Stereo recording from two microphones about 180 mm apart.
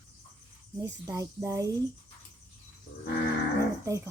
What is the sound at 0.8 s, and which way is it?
Speech, 20° right (ahead or behind).